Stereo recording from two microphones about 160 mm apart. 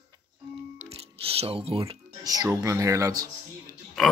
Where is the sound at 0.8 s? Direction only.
35° right (ahead or behind).